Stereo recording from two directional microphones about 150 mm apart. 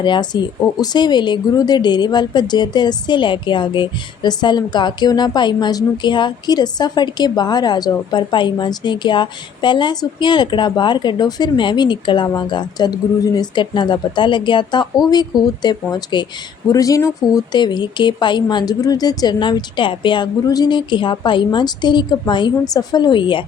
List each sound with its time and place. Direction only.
0.0 s speech: 30° left (ahead or behind)